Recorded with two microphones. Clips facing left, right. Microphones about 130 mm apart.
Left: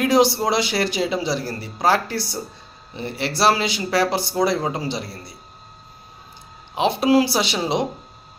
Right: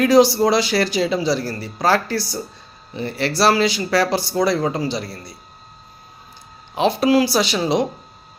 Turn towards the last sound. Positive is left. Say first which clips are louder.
# right 3 dB
turn(degrees=20)  # may be behind; listen again after turning